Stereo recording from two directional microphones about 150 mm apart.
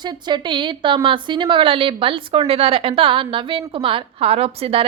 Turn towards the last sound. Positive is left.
turn(degrees=-40)  # may be behind; listen again after turning